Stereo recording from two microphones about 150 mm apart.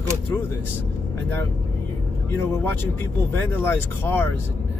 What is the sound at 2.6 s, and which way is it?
Speech, 15° left (ahead or behind).